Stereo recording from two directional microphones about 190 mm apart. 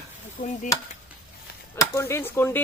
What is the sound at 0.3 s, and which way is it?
Speech, 40° left (ahead or behind).